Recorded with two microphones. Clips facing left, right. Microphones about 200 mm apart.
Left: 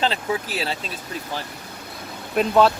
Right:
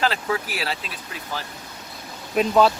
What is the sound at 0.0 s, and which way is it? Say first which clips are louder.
Speech: even; 25° left (ahead or behind).